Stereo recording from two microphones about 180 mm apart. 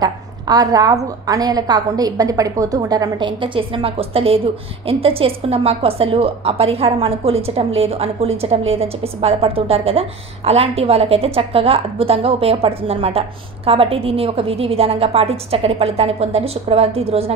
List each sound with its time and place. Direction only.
0.0 s a woman's voice: 20° right (ahead or behind)